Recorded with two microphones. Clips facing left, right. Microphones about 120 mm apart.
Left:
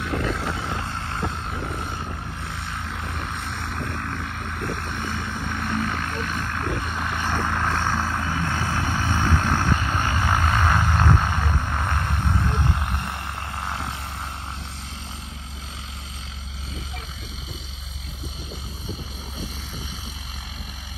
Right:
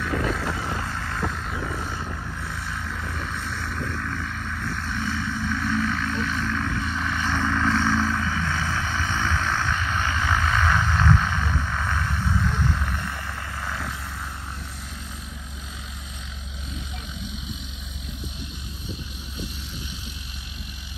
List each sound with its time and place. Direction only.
0.3 s vehicle: 25° left (ahead or behind)
3.0 s vehicle: 50° left (ahead or behind)
13.6 s a sound: 25° left (ahead or behind)